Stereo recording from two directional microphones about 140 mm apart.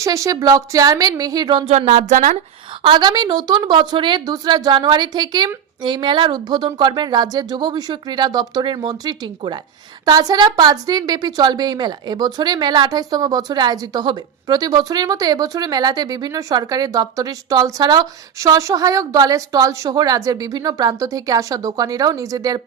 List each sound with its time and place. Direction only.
0.0 s a woman's voice: 25° right (ahead or behind)
1.7 s speech: 55° right (ahead or behind)
2.8 s a woman's voice: 30° right (ahead or behind)